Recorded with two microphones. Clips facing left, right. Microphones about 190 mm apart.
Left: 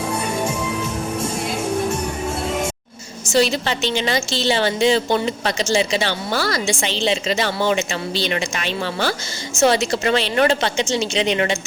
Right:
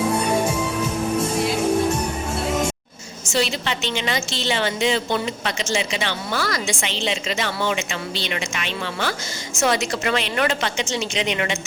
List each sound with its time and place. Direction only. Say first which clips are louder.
3.3 s a woman's voice: left 5 dB; 40° left (ahead or behind)